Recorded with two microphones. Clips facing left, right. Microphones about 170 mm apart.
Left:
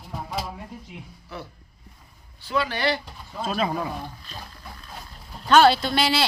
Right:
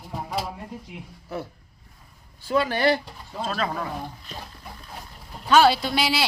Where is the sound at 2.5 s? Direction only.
45° right (ahead or behind).